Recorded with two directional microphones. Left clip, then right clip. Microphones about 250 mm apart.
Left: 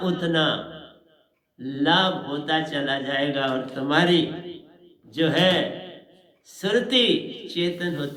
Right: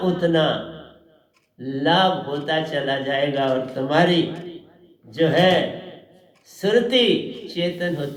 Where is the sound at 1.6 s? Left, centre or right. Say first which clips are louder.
Right 3 dB; left.